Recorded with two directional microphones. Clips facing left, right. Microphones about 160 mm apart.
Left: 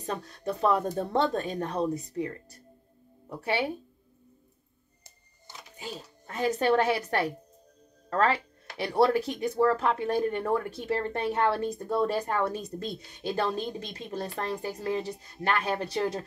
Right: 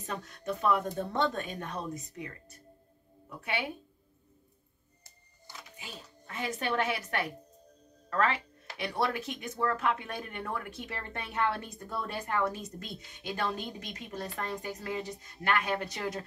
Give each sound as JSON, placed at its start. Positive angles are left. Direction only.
{"t": 0.0, "sound": "speech", "side_deg": 35}
{"t": 5.8, "sound": "speech", "side_deg": 40}